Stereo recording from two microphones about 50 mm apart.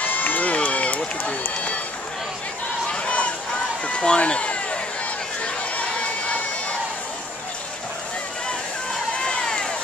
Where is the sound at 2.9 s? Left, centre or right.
Left.